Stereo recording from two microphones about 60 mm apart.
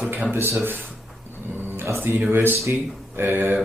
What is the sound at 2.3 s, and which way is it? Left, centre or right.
Speech, right.